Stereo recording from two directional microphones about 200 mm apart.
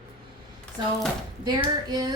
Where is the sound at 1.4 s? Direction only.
20° right (ahead or behind).